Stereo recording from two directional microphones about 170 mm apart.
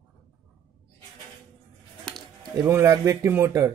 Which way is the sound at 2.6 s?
15° right (ahead or behind).